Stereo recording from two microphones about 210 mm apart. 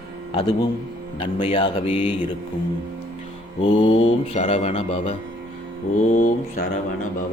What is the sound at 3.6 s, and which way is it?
A man's voice, 30° left (ahead or behind).